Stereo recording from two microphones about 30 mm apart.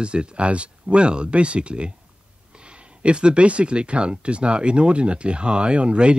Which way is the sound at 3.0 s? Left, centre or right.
Right.